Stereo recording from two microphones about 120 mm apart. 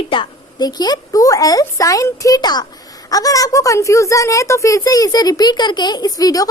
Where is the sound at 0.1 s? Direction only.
40° left (ahead or behind).